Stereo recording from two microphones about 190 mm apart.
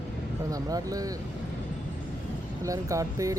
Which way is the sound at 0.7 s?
20° right (ahead or behind).